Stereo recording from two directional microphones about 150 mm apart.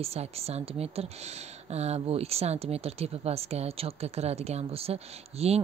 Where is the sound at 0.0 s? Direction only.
45° right (ahead or behind).